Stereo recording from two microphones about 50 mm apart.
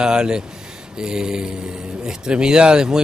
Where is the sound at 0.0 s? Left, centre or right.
Centre.